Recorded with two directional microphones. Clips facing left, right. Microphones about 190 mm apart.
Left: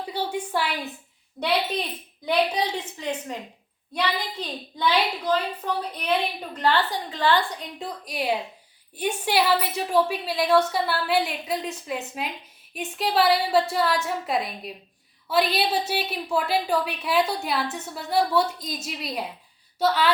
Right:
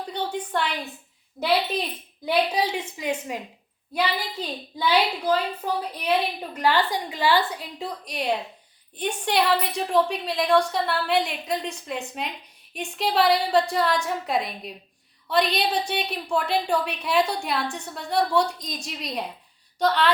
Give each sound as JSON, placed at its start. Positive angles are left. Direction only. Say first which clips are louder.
{"t": 0.1, "sound": "a woman's voice", "louder": "left 1 dB", "side_deg": 10}
{"t": 2.2, "sound": "a woman's voice", "louder": "even", "side_deg": -10}